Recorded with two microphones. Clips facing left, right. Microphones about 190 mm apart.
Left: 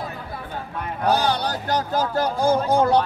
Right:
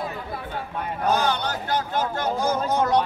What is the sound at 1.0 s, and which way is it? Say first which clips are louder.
A man's voice: left 2 dB; 35° left (ahead or behind).